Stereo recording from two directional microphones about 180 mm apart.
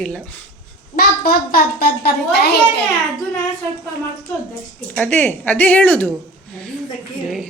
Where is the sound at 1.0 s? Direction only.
55° left (ahead or behind).